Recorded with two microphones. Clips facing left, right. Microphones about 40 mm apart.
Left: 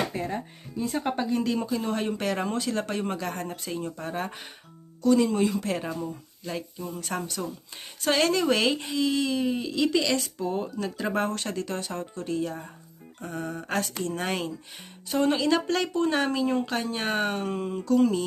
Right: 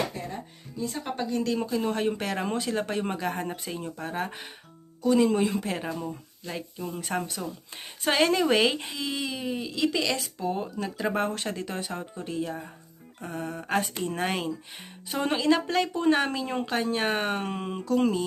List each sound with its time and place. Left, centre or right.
0.1 s speech: left
1.1 s speech: centre
1.5 s speech: centre
3.7 s speech: centre
5.0 s speech: centre
7.4 s speech: centre
8.0 s speech: centre
13.7 s speech: right
14.2 s speech: centre
16.4 s speech: centre
16.6 s speech: centre
17.4 s speech: right